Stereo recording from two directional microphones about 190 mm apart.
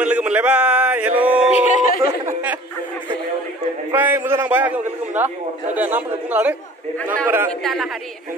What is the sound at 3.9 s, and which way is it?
A man's voice, 10° right (ahead or behind).